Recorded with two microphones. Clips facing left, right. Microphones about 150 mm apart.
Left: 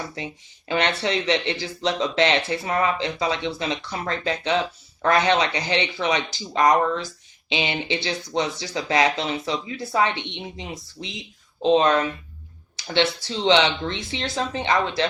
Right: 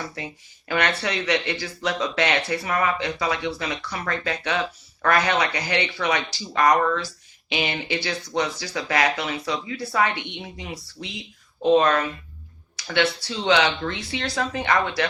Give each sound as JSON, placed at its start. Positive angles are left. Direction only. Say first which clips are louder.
{"t": 0.2, "sound": "speech", "louder": "left 2 dB", "side_deg": 25}